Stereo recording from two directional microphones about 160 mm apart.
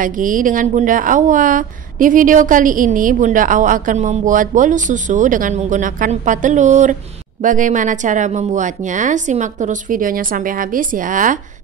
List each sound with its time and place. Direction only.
0.0 s a woman's voice: 55° right (ahead or behind)